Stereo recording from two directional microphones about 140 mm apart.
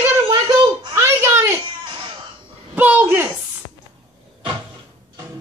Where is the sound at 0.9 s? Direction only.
20° right (ahead or behind).